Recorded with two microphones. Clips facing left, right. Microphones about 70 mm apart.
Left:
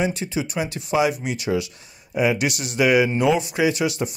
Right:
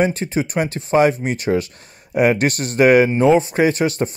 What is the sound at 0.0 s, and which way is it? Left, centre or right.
Speech, right.